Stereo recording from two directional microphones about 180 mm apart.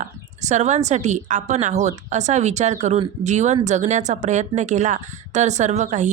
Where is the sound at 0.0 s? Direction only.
40° right (ahead or behind).